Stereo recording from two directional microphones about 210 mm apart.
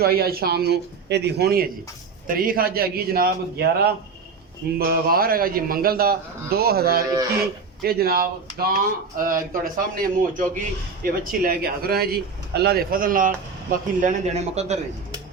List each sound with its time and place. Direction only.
0.0 s speech: 45° right (ahead or behind)